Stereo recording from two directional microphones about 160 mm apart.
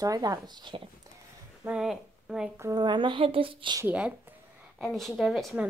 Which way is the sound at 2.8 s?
30° right (ahead or behind).